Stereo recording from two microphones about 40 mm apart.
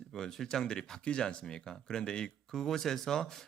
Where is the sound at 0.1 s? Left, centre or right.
Centre.